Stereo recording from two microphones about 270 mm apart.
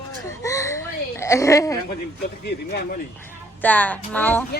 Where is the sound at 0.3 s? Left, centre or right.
Centre.